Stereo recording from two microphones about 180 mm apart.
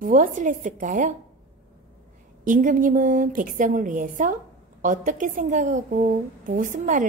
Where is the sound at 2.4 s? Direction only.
45° right (ahead or behind).